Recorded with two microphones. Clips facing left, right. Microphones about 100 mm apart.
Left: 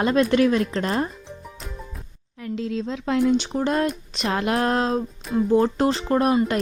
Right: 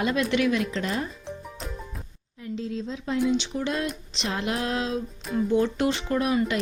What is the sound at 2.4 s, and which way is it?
Speech, 80° left.